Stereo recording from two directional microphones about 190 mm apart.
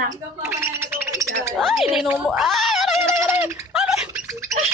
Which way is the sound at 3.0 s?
10° right (ahead or behind).